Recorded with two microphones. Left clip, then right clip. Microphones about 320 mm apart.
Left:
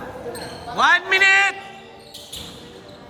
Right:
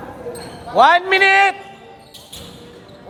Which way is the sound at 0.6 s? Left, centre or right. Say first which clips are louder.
Right 5 dB; centre.